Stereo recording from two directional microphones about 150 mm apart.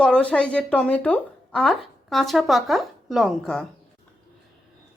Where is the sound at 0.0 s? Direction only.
5° left (ahead or behind).